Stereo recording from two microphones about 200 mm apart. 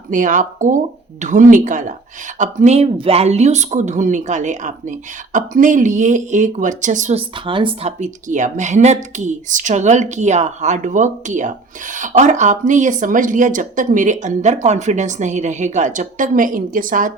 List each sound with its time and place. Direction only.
0.1 s speech: 40° right (ahead or behind)